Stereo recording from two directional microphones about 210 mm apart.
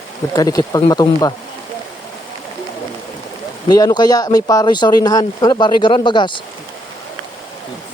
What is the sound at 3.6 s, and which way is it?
Speech, 20° left (ahead or behind).